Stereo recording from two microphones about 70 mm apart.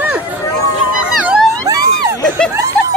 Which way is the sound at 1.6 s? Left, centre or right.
Right.